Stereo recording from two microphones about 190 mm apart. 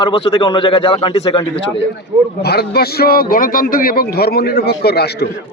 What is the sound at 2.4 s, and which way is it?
A man's voice, 55° left (ahead or behind).